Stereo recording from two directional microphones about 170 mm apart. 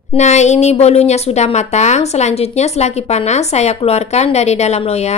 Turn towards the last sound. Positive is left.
turn(degrees=40)  # may be behind; listen again after turning